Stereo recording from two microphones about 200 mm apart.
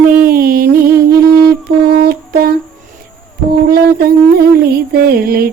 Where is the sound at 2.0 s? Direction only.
50° right (ahead or behind).